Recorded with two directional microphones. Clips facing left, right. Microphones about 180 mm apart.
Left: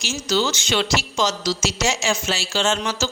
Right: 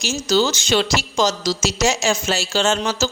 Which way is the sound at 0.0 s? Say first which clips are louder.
Right 4 dB; 40° right (ahead or behind).